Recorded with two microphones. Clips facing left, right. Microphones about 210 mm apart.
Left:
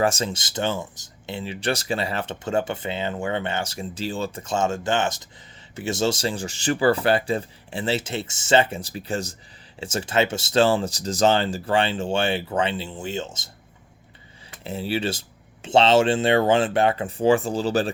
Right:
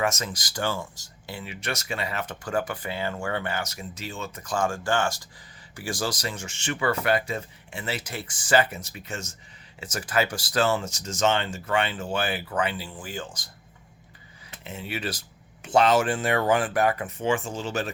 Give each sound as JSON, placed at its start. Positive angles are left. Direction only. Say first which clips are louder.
{"t": 0.0, "sound": "speech", "louder": "left 5 dB", "side_deg": 30}
{"t": 14.6, "sound": "speech", "louder": "left 7 dB", "side_deg": 35}